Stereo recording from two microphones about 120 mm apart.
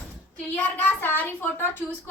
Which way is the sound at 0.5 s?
15° left (ahead or behind).